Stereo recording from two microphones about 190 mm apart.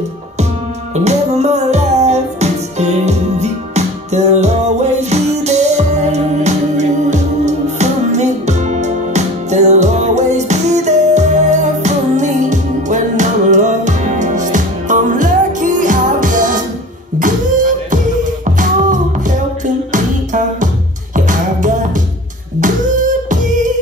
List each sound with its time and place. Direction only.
0.9 s music: 35° right (ahead or behind)
18.6 s music: 40° right (ahead or behind)